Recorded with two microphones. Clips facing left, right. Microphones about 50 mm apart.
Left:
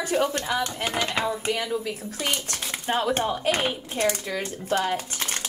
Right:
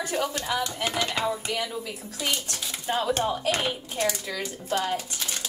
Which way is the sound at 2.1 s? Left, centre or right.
Left.